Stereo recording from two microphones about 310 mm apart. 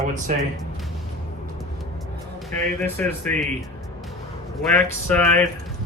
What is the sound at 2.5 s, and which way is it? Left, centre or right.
Speech, centre.